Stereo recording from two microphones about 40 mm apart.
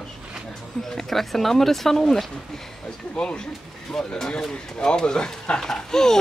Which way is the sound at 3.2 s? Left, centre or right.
Left.